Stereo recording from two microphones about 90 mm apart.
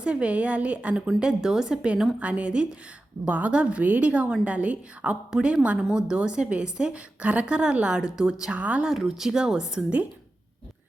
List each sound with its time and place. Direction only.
0.0 s a woman's voice: 15° right (ahead or behind)
8.9 s a woman's voice: 5° right (ahead or behind)